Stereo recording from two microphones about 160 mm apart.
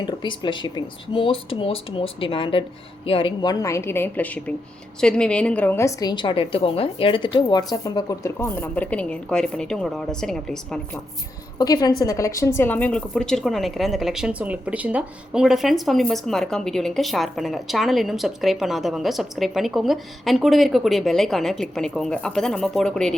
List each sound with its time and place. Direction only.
0.0 s a woman's voice: 30° left (ahead or behind); by 11.0 s 5° left (ahead or behind)
11.5 s a woman's voice: 25° left (ahead or behind); by 23.1 s 5° left (ahead or behind)